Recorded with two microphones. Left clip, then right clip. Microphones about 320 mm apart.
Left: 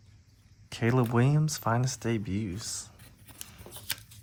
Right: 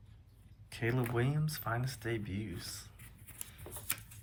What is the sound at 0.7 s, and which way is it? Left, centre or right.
Speech, left.